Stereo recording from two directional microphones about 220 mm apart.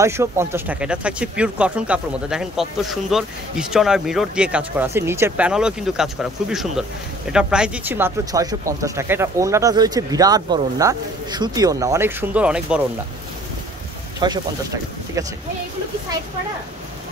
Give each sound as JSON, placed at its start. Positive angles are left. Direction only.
{"t": 0.0, "sound": "speech", "side_deg": -10}
{"t": 14.2, "sound": "speech", "side_deg": -20}